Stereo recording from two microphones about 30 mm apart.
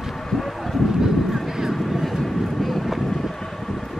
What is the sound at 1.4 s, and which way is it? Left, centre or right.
Vehicle, centre.